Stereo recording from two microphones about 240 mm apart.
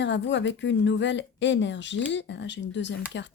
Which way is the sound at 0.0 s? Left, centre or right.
Left.